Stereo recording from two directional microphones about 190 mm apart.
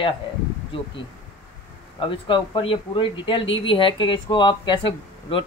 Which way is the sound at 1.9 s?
25° left (ahead or behind).